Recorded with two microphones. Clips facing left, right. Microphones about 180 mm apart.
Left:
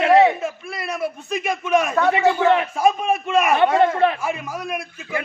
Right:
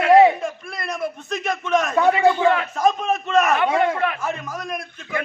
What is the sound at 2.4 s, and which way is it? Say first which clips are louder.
Speech: left 1 dB; 25° left (ahead or behind).